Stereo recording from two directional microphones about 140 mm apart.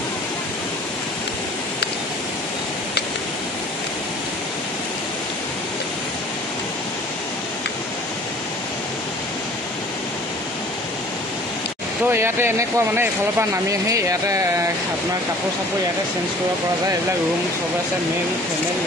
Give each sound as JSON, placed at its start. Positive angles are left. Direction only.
{"t": 12.1, "sound": "speech", "side_deg": -15}